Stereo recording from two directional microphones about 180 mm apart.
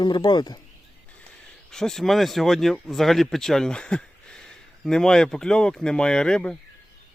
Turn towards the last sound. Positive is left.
turn(degrees=5)  # may be behind; listen again after turning